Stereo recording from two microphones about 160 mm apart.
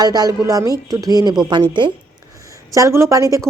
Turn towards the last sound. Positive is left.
turn(degrees=-20)  # may be behind; listen again after turning